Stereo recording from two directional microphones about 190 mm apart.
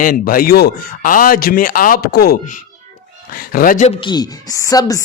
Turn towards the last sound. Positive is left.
turn(degrees=20)  # may be behind; listen again after turning